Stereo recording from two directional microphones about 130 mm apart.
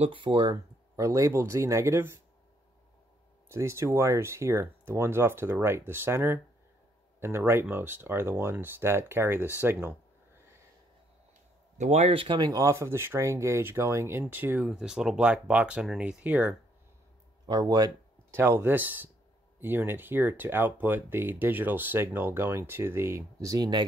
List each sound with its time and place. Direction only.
0.0 s speech: 40° right (ahead or behind)
0.9 s speech: 25° right (ahead or behind)
3.4 s speech: 20° right (ahead or behind)
11.8 s speech: 55° right (ahead or behind); by 16.5 s 10° right (ahead or behind)
17.5 s speech: 30° right (ahead or behind)
18.3 s speech: 15° right (ahead or behind)